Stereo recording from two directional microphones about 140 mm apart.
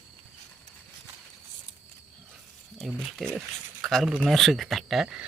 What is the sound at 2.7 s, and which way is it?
Speech, centre (ahead or behind).